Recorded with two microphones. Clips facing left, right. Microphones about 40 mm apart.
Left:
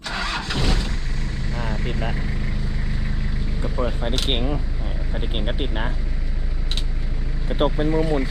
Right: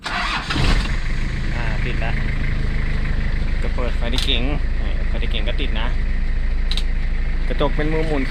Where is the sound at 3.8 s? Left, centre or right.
Centre.